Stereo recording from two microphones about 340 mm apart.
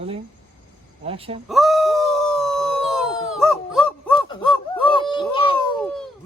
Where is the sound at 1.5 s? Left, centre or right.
Centre.